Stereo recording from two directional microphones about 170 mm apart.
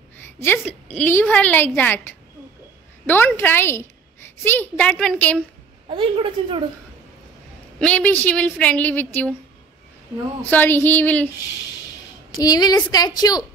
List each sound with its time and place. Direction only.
0.4 s a woman's voice: 10° left (ahead or behind)
5.9 s a woman's voice: 30° right (ahead or behind)
7.8 s a woman's voice: 10° left (ahead or behind)
10.4 s a woman's voice: 10° left (ahead or behind)
12.4 s a woman's voice: 25° left (ahead or behind)